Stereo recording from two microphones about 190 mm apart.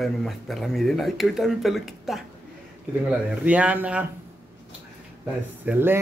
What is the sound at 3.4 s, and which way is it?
Speech, 5° right (ahead or behind).